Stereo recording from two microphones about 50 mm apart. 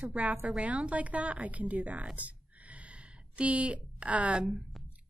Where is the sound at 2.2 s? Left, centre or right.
Right.